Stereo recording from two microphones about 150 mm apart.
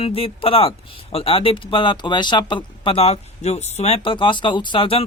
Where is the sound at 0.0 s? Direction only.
40° left (ahead or behind).